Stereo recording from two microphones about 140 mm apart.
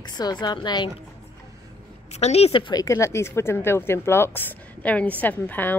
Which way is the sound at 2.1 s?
50° left (ahead or behind).